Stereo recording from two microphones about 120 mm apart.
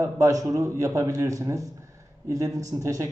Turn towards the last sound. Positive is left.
turn(degrees=-25)  # may be behind; listen again after turning